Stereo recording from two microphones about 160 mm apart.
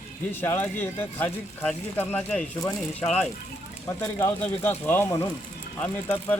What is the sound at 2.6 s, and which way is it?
Speech, 20° left (ahead or behind).